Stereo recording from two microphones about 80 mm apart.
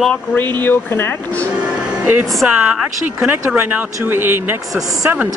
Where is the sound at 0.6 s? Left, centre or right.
Left.